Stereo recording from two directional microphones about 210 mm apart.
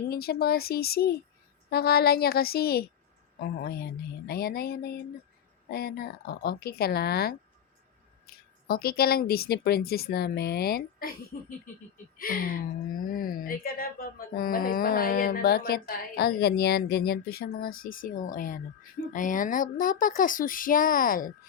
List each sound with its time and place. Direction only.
0.1 s a woman's voice: 45° left (ahead or behind)
8.3 s a sound: 45° left (ahead or behind)
8.6 s a woman's voice: 45° left (ahead or behind)